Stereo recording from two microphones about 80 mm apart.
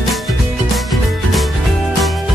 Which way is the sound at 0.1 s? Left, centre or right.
Centre.